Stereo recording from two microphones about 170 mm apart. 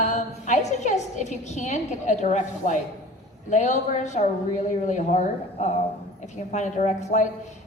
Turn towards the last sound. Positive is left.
turn(degrees=40)  # may be behind; listen again after turning